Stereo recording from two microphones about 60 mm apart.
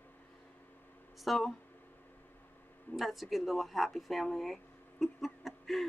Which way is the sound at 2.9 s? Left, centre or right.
Centre.